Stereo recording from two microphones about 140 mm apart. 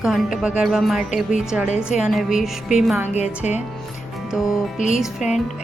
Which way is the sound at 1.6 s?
55° left (ahead or behind).